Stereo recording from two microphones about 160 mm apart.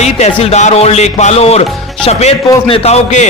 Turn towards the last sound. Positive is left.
turn(degrees=45)  # may be behind; listen again after turning